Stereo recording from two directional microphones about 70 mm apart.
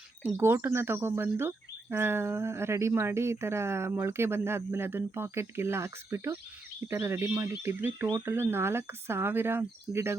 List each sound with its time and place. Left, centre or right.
0.5 s speech: right